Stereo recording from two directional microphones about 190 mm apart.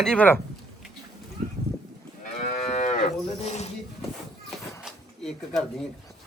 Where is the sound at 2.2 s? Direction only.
35° left (ahead or behind).